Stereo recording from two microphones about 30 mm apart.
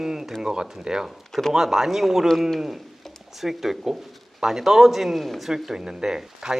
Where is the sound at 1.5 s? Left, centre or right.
Centre.